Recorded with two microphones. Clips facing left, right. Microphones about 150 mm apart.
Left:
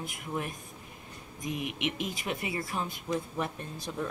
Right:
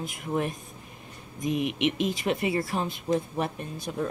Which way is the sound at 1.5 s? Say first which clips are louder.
Right 8 dB; 80° right.